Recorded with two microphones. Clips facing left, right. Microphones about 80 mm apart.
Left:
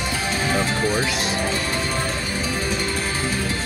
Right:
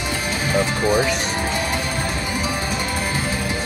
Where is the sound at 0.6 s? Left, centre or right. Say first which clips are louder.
Right 6 dB; centre.